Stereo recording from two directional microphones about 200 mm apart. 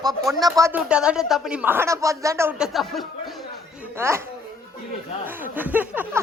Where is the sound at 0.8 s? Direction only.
5° right (ahead or behind).